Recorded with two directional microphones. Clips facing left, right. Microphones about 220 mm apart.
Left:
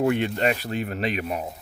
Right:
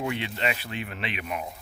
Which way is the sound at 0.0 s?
50° left (ahead or behind).